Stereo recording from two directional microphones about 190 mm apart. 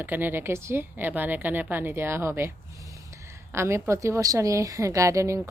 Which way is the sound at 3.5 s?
15° right (ahead or behind).